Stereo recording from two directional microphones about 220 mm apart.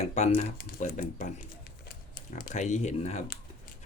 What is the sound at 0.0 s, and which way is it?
Speech, 30° left (ahead or behind).